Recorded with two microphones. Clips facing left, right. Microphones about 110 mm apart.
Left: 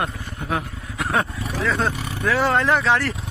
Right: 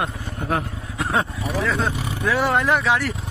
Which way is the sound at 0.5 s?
25° right (ahead or behind).